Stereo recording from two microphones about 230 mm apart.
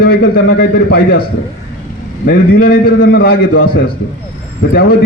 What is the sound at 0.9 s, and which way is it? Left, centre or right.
Speech, left.